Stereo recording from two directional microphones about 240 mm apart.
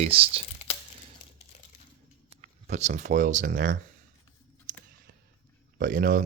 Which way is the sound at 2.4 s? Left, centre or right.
Right.